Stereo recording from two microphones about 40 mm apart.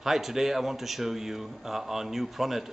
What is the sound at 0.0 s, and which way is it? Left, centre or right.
A man's voice, centre.